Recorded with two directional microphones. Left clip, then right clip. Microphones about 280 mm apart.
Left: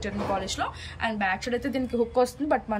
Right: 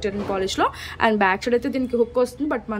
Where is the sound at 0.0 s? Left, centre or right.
Centre.